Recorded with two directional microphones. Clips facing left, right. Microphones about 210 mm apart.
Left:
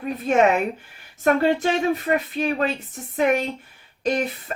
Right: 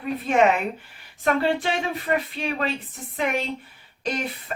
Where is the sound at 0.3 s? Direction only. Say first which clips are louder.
Left 2 dB; 45° left (ahead or behind).